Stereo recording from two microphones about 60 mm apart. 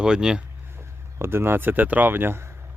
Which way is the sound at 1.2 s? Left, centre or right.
Right.